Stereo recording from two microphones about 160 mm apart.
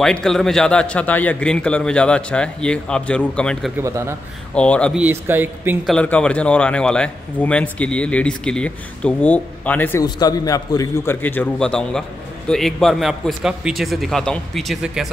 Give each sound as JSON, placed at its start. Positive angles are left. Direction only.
{"t": 0.0, "sound": "speech", "side_deg": 5}
{"t": 4.9, "sound": "speech", "side_deg": -10}
{"t": 5.9, "sound": "speech", "side_deg": 5}
{"t": 10.0, "sound": "a man's voice", "side_deg": 25}